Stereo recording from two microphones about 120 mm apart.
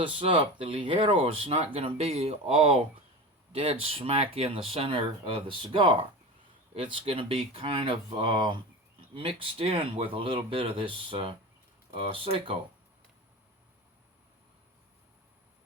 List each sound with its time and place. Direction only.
0.0 s speech: 50° right (ahead or behind)